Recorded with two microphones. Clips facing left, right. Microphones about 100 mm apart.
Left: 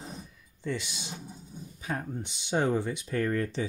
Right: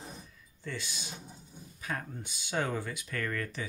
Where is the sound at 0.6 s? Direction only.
20° left (ahead or behind).